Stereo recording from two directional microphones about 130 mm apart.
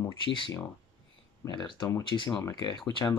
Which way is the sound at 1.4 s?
35° left (ahead or behind).